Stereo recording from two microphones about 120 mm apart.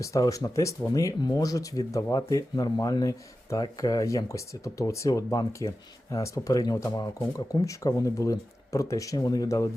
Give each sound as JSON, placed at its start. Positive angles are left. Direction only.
{"t": 0.0, "sound": "speech", "side_deg": 30}